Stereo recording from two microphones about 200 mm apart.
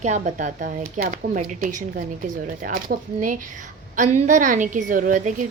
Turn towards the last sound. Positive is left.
turn(degrees=-40)  # may be behind; listen again after turning